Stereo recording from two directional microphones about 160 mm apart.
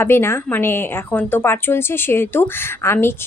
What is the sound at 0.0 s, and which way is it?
Speech, 15° left (ahead or behind).